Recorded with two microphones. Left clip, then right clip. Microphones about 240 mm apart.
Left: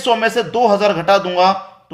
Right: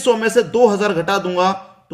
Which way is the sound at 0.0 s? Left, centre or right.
Centre.